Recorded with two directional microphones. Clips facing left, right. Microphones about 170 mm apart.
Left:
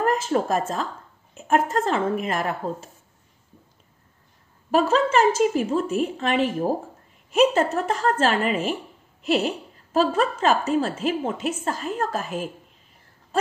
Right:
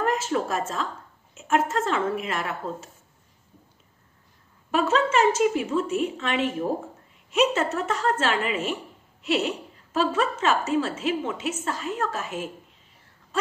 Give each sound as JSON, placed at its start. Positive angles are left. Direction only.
{"t": 0.0, "sound": "a woman's voice", "side_deg": 40}
{"t": 4.6, "sound": "a woman's voice", "side_deg": 40}